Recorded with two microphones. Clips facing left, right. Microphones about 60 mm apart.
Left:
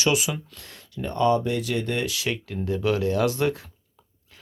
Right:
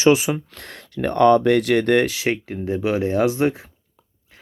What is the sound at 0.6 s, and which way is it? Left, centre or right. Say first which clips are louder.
Speech: right 8 dB; right.